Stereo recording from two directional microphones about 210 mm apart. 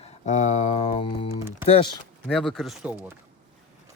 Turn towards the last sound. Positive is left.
turn(degrees=-5)  # may be behind; listen again after turning